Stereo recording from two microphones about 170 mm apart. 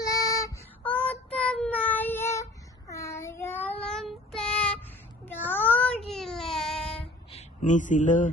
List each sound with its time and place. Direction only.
0.0 s female singing: 20° left (ahead or behind)
0.9 s child singing: 10° left (ahead or behind)
6.1 s babbling: centre (ahead or behind)
7.3 s speech: 45° left (ahead or behind)